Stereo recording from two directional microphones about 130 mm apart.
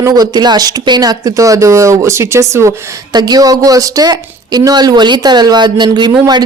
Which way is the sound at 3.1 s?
30° right (ahead or behind).